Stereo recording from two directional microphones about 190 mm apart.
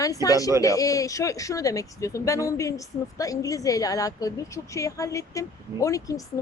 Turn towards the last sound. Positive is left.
turn(degrees=15)  # may be behind; listen again after turning